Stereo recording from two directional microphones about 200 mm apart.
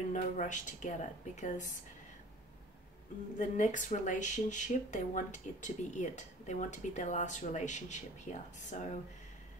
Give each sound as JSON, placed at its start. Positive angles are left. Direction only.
{"t": 0.1, "sound": "speech", "side_deg": 40}
{"t": 3.3, "sound": "speech", "side_deg": 40}